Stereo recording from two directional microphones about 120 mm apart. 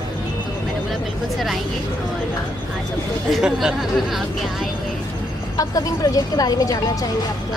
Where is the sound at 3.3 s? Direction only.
5° right (ahead or behind).